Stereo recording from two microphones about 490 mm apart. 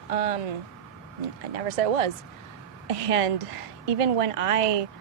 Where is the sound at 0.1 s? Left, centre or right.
Right.